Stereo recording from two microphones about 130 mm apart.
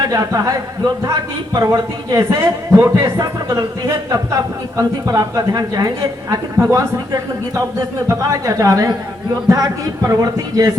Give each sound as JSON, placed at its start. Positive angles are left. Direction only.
{"t": 0.1, "sound": "a man's voice", "side_deg": -25}